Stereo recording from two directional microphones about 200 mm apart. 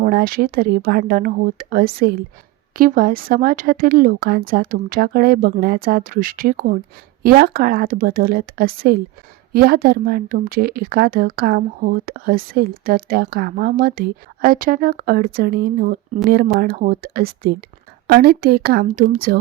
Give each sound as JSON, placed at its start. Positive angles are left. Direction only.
{"t": 0.0, "sound": "a woman's voice", "side_deg": -50}